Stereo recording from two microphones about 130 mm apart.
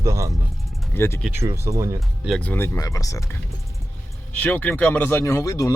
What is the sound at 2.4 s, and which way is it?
Speech, 15° left (ahead or behind).